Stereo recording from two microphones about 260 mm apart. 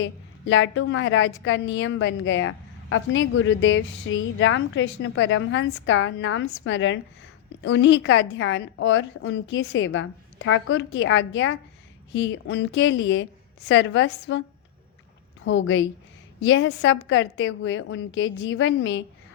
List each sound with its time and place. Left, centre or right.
0.0 s a woman's voice: left
15.4 s a woman's voice: left